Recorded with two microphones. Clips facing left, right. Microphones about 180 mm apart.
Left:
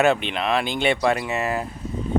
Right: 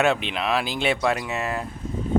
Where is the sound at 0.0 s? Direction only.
Centre (ahead or behind).